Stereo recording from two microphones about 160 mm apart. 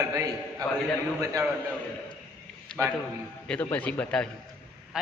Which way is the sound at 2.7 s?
5° left (ahead or behind).